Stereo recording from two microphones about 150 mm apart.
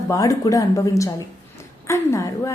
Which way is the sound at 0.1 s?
20° left (ahead or behind).